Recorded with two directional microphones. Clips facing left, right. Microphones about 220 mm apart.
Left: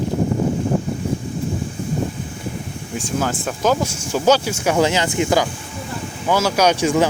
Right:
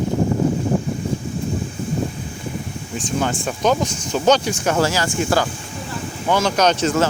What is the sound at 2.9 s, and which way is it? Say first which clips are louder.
Speech: even; 5° left (ahead or behind).